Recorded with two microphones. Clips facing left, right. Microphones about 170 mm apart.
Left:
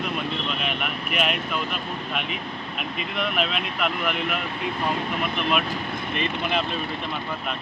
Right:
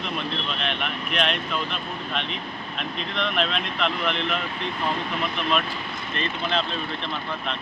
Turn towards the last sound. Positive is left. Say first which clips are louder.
# left 1 dB
turn(degrees=10)  # may be behind; listen again after turning